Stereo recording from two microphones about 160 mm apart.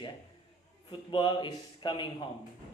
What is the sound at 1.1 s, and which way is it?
A man's voice, 30° left (ahead or behind).